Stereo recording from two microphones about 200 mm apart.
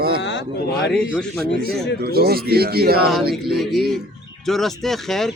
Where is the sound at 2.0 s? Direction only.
50° right (ahead or behind).